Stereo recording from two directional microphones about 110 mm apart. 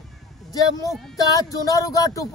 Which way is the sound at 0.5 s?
30° left (ahead or behind).